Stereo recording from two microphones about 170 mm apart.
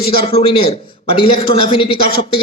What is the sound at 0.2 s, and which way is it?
A man's voice, 35° left (ahead or behind).